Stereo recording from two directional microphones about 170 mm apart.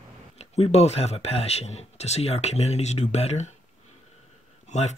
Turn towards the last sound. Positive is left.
turn(degrees=40)  # may be behind; listen again after turning